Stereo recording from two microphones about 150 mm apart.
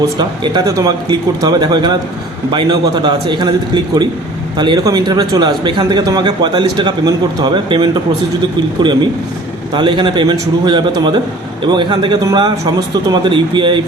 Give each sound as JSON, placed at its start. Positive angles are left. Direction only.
{"t": 0.2, "sound": "a man's voice", "side_deg": -30}